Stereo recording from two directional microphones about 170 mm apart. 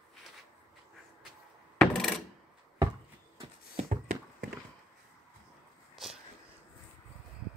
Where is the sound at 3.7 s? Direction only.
45° right (ahead or behind).